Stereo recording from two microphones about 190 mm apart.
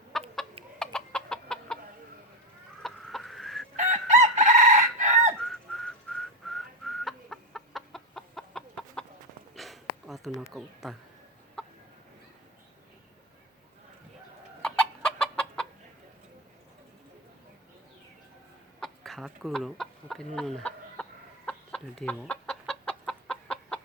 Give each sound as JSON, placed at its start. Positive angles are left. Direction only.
{"t": 0.1, "sound": "chicken", "side_deg": 0}
{"t": 2.8, "sound": "chicken", "side_deg": 0}
{"t": 3.8, "sound": "chicken", "side_deg": -40}
{"t": 5.4, "sound": "whistling", "side_deg": 0}
{"t": 9.6, "sound": "a sound", "side_deg": 0}
{"t": 10.5, "sound": "speech", "side_deg": 0}
{"t": 11.6, "sound": "chicken", "side_deg": 5}
{"t": 14.6, "sound": "chicken", "side_deg": 5}
{"t": 18.8, "sound": "chicken", "side_deg": 0}